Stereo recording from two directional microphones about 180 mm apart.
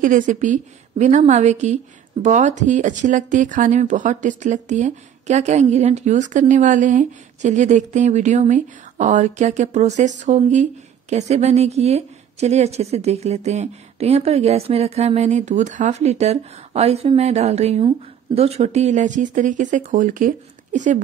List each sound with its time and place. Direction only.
0.0 s speech: 45° right (ahead or behind)